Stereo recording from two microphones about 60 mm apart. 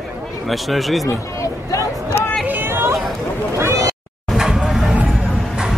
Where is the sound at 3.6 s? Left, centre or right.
Right.